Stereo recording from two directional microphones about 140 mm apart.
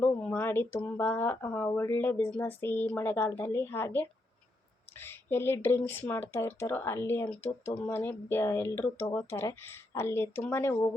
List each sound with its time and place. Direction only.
0.0 s speech: 10° left (ahead or behind)